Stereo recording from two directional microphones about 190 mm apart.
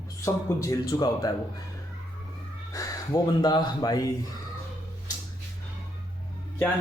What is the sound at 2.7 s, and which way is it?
Speech, 20° left (ahead or behind).